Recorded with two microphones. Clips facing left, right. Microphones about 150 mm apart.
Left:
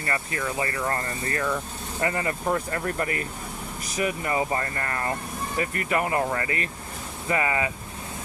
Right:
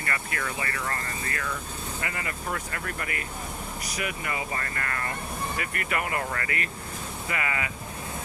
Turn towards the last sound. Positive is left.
turn(degrees=30)  # may be behind; listen again after turning